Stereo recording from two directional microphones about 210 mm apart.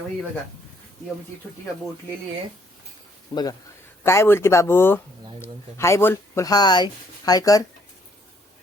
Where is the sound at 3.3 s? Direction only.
20° left (ahead or behind).